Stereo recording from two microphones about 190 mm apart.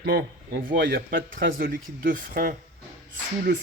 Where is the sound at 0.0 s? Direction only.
60° right (ahead or behind).